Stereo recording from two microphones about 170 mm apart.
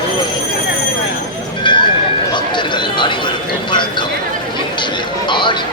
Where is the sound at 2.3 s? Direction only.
25° left (ahead or behind).